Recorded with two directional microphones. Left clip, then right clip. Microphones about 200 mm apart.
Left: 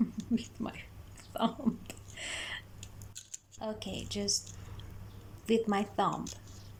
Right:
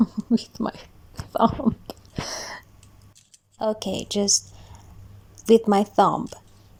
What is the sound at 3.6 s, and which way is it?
Speech, 40° right (ahead or behind).